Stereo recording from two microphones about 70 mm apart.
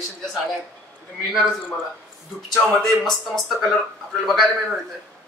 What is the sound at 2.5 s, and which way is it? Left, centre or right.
Speech, centre.